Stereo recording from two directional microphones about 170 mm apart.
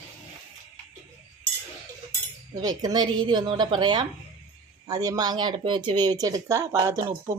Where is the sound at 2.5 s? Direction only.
20° right (ahead or behind).